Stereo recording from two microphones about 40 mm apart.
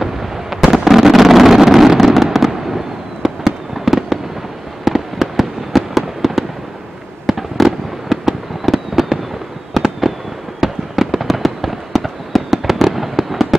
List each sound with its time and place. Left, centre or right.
0.0 s fireworks: centre
10.6 s fireworks: centre